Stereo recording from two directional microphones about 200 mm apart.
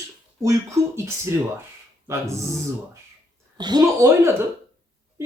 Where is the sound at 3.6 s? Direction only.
20° right (ahead or behind).